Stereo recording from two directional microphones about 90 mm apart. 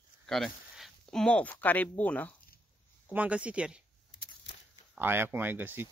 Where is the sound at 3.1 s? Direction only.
15° right (ahead or behind).